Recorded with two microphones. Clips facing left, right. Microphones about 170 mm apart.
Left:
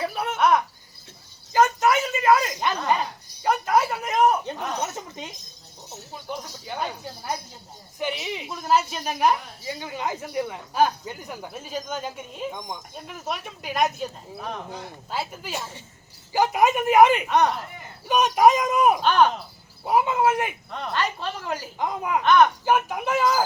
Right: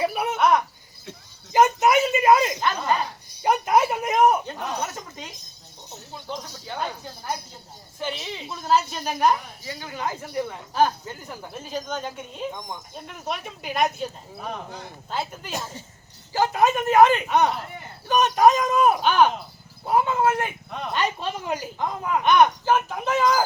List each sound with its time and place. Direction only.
0.0 s a sound: 15° right (ahead or behind)
1.5 s a sound: 20° right (ahead or behind)
6.1 s speech: 10° left (ahead or behind)
7.9 s speech: 15° left (ahead or behind)
17.2 s speech: 5° right (ahead or behind)
18.1 s speech: 15° left (ahead or behind)
19.0 s a woman's voice: 5° right (ahead or behind)
19.8 s speech: 15° left (ahead or behind)
20.7 s speech: 5° right (ahead or behind)
20.9 s a woman's voice: 15° right (ahead or behind)
21.8 s speech: 15° left (ahead or behind)
22.2 s a woman's voice: 15° right (ahead or behind)
22.6 s speech: 10° left (ahead or behind)